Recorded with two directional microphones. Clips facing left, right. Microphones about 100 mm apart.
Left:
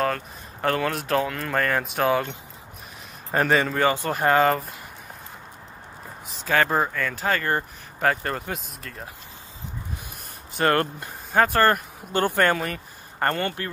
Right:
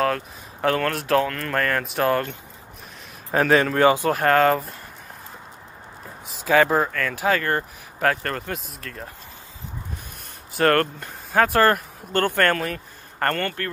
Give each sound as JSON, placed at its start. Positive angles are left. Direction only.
{"t": 0.0, "sound": "speech", "side_deg": 0}
{"t": 3.3, "sound": "speech", "side_deg": 0}
{"t": 3.8, "sound": "speech", "side_deg": -10}
{"t": 4.1, "sound": "speech", "side_deg": 5}
{"t": 6.3, "sound": "speech", "side_deg": -5}
{"t": 10.5, "sound": "speech", "side_deg": 0}
{"t": 13.3, "sound": "speech", "side_deg": 15}